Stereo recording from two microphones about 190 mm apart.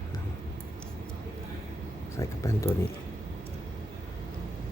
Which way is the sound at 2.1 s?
15° left (ahead or behind).